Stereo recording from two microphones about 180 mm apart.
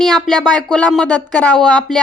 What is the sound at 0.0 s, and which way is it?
Speech, 5° left (ahead or behind).